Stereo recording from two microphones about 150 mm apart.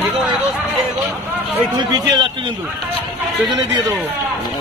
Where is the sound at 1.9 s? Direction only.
30° right (ahead or behind).